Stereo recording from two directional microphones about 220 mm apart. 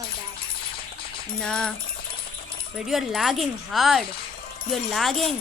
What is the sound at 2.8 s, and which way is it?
Speech, centre (ahead or behind).